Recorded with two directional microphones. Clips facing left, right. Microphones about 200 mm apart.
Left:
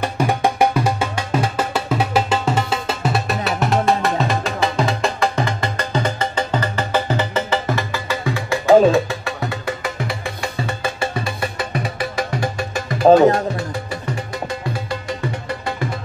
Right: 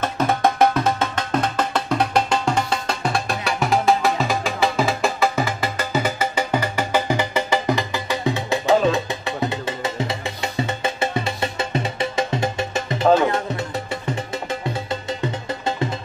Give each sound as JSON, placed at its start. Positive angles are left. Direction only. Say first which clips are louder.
{"t": 0.0, "sound": "music", "louder": "left 1 dB", "side_deg": 10}
{"t": 13.0, "sound": "music", "louder": "left 6 dB", "side_deg": 40}
{"t": 14.5, "sound": "music", "louder": "even", "side_deg": -25}